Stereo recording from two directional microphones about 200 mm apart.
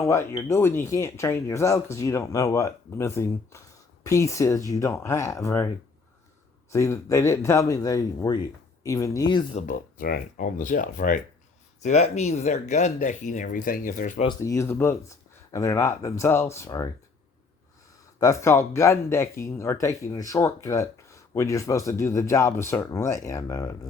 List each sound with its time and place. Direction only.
0.0 s speech: 15° left (ahead or behind)
6.7 s speech: 15° left (ahead or behind); by 14.3 s 40° left (ahead or behind)
14.3 s speech: 15° left (ahead or behind)
18.2 s speech: 15° left (ahead or behind)